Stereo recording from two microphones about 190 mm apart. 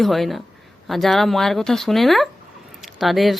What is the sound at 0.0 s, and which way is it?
Speech, centre (ahead or behind).